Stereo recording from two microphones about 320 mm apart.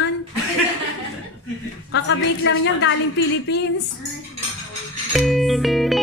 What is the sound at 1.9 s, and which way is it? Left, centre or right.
A woman's voice, left.